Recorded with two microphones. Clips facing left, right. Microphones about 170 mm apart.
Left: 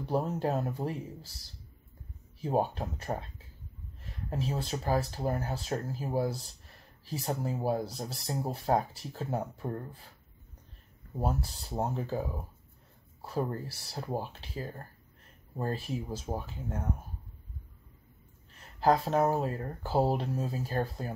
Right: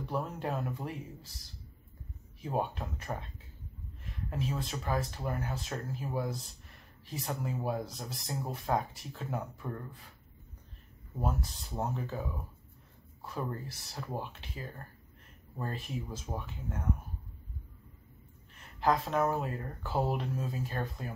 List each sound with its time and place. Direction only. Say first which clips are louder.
0.1 s speech: left 6 dB; 35° left (ahead or behind)
2.4 s speech: left 4 dB; 35° left (ahead or behind)
4.3 s speech: left 3 dB; 35° left (ahead or behind)
11.1 s speech: left 2 dB; 35° left (ahead or behind)
18.8 s speech: left 3 dB; 35° left (ahead or behind)